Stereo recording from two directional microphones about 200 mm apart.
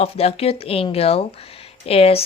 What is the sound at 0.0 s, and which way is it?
Speech, 30° left (ahead or behind).